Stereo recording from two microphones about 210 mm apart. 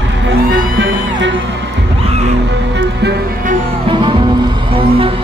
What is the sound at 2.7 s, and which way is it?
Music, 45° right (ahead or behind).